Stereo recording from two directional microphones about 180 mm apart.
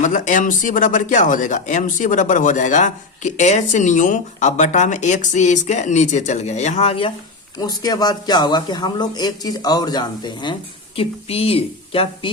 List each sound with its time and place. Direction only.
0.0 s speech: 45° left (ahead or behind)
7.6 s speech: 20° left (ahead or behind)